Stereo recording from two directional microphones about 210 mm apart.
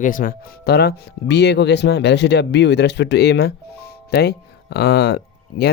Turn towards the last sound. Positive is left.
turn(degrees=50)  # may be behind; listen again after turning